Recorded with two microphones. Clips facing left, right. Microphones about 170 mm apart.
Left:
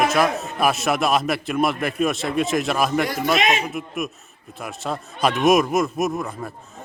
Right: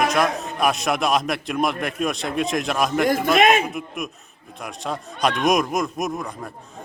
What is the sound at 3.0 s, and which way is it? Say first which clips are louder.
Speech: right 4 dB; 50° right (ahead or behind).